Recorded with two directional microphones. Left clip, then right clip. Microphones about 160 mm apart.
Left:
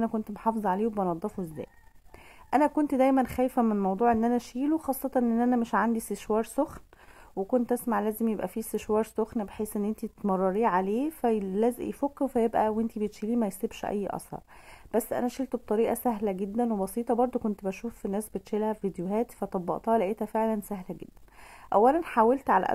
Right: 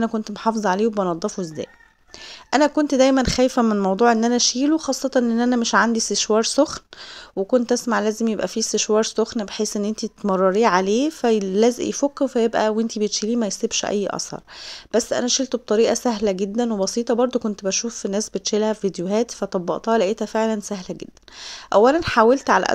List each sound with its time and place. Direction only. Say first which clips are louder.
0.0 s speech: right 7 dB; 40° right (ahead or behind)